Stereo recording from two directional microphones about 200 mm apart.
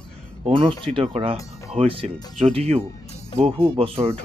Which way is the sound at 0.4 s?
25° right (ahead or behind).